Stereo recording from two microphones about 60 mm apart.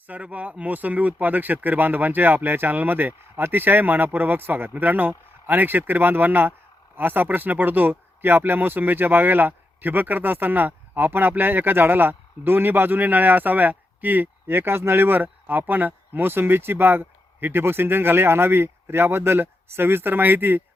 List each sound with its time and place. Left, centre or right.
0.1 s speech: right